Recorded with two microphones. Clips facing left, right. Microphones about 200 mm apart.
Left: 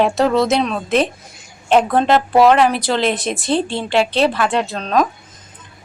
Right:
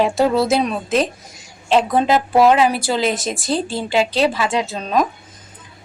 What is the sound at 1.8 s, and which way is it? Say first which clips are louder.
A woman's voice: left 1 dB; 10° right (ahead or behind).